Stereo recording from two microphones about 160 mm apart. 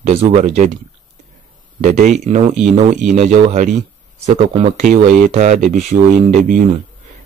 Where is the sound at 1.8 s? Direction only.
50° right (ahead or behind).